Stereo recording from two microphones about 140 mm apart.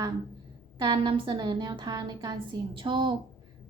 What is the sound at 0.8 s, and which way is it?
A woman's voice, 35° right (ahead or behind).